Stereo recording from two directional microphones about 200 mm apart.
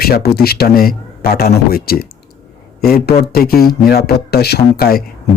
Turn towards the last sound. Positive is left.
turn(degrees=50)  # may be behind; listen again after turning